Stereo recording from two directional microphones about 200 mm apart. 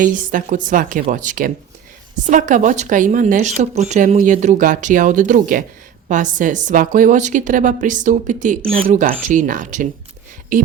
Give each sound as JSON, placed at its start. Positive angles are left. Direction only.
{"t": 0.0, "sound": "speech", "side_deg": -40}